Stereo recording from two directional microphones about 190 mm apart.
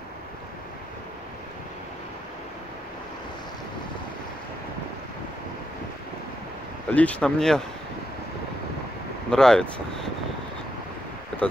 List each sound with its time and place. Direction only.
6.9 s speech: 5° left (ahead or behind)
9.3 s speech: 5° left (ahead or behind)